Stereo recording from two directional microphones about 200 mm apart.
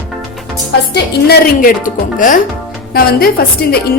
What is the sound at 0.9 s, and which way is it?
A woman's voice, 50° left (ahead or behind).